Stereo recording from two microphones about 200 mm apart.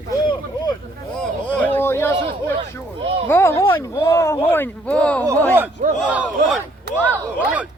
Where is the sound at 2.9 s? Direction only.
30° right (ahead or behind).